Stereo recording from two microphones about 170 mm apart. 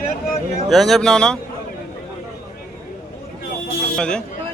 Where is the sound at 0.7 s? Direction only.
Centre (ahead or behind).